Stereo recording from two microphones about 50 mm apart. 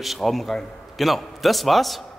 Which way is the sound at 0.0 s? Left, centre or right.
Centre.